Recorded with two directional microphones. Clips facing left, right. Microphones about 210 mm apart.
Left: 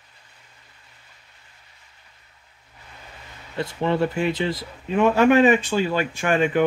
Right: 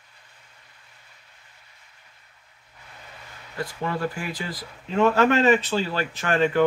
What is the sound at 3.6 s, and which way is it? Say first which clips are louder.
Speech: left 6 dB; 25° left (ahead or behind).